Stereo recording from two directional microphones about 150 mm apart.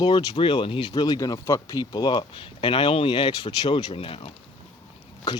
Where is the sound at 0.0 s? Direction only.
30° left (ahead or behind).